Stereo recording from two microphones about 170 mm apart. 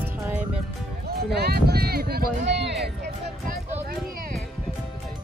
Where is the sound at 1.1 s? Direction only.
70° right (ahead or behind).